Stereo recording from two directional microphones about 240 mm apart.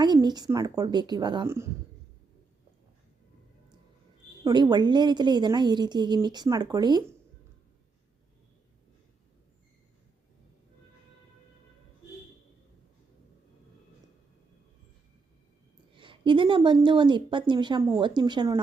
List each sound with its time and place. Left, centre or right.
0.0 s a woman's voice: centre
4.4 s a woman's voice: centre
16.0 s a woman's voice: right